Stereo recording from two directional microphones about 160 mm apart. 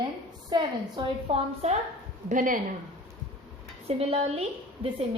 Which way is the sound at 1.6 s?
40° right (ahead or behind).